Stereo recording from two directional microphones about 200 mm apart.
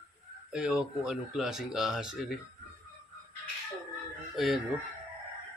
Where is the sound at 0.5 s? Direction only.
5° right (ahead or behind).